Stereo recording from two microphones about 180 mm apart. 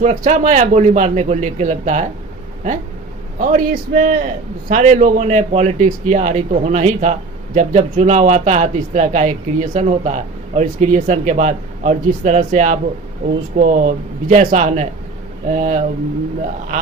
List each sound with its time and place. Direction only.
0.0 s a man's voice: 45° right (ahead or behind)
3.3 s a man's voice: 50° right (ahead or behind)